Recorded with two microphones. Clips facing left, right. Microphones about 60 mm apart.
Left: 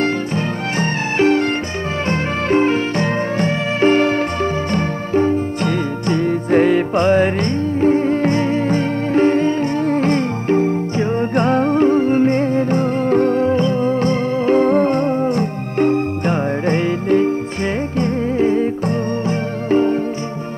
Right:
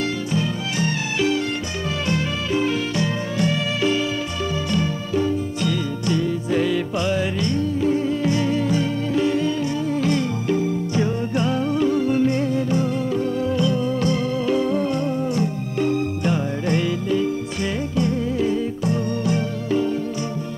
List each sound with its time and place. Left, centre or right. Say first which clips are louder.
0.0 s music: left 4 dB; left